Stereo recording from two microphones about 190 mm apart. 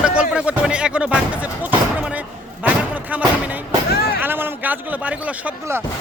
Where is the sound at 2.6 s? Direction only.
10° right (ahead or behind).